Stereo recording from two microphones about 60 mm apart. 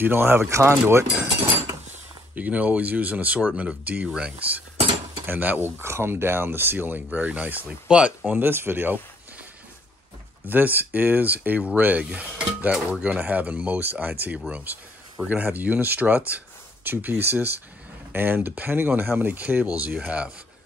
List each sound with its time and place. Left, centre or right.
0.0 s speech: right
0.5 s speech: right
2.3 s speech: right
5.8 s speech: right
7.1 s speech: right
8.3 s speech: right
10.4 s speech: right